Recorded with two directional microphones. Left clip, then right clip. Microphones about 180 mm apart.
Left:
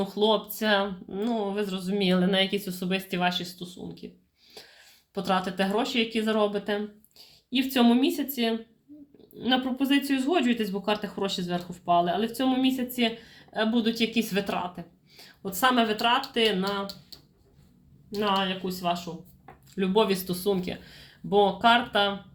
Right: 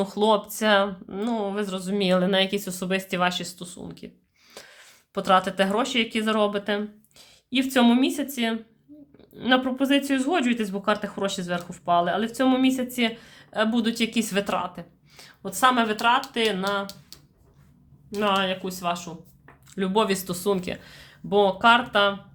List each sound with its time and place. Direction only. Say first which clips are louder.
0.0 s speech: right 3 dB; 25° right (ahead or behind)
18.1 s speech: right 3 dB; 25° right (ahead or behind)